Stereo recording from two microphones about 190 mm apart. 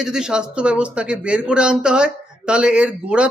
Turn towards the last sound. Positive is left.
turn(degrees=-5)  # may be behind; listen again after turning